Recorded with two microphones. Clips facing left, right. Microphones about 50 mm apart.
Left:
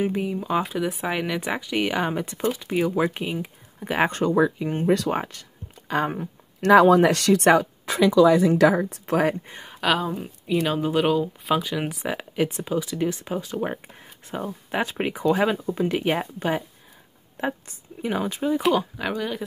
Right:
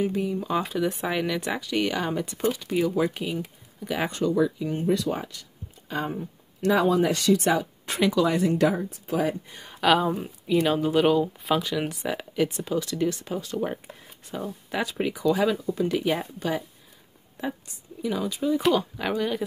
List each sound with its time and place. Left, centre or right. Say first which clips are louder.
0.0 s speech: left 1 dB; left
0.4 s speech: left 2 dB; centre; by 4.5 s left
4.8 s speech: left 3 dB; left
5.1 s speech: left 5 dB; left
5.9 s speech: left 5 dB; left
8.6 s speech: left 5 dB; left
9.0 s speech: left 3 dB; left
9.7 s speech: right 2 dB; centre; by 16.6 s left
17.4 s a woman's voice: left 4 dB; left
18.6 s speech: left 1 dB; centre
19.0 s speech: right 1 dB; centre